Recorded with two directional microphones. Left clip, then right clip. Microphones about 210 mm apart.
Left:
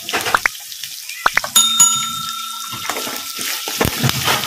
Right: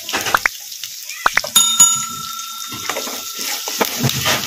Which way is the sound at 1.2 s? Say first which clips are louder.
Even; centre (ahead or behind).